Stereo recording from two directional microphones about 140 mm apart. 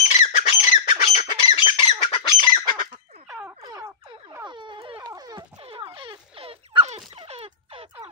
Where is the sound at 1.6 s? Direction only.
40° left (ahead or behind).